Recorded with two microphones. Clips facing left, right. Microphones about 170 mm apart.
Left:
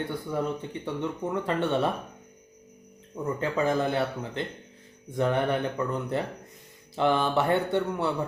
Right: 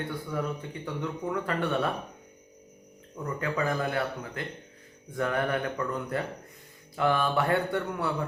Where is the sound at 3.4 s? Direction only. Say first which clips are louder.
Left 3 dB; 25° left (ahead or behind).